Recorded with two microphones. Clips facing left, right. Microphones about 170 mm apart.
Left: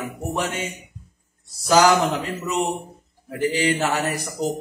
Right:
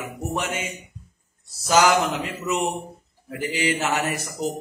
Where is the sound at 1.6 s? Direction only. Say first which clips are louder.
Left 2 dB; 35° left (ahead or behind).